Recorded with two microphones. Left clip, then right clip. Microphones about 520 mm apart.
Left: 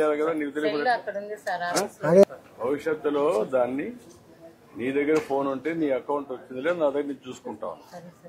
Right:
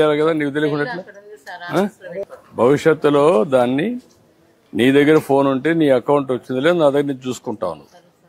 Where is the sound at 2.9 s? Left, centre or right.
Right.